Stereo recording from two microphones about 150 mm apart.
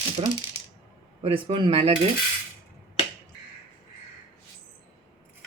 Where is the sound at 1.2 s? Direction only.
35° right (ahead or behind).